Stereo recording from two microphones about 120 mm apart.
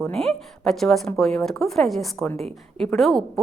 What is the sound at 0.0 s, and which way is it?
A woman's voice, 5° left (ahead or behind).